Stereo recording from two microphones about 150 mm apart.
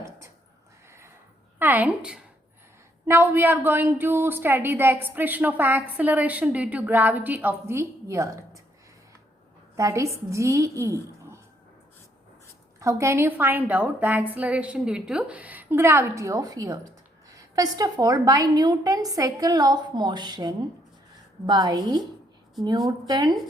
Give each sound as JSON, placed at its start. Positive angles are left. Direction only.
{"t": 1.5, "sound": "a woman's voice", "side_deg": -10}
{"t": 9.7, "sound": "a woman's voice", "side_deg": -20}
{"t": 12.8, "sound": "a woman's voice", "side_deg": -20}